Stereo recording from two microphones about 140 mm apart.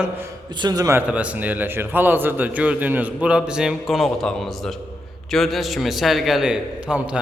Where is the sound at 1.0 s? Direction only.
10° right (ahead or behind).